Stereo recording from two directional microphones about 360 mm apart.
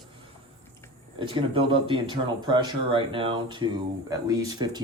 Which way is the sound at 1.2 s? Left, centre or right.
Centre.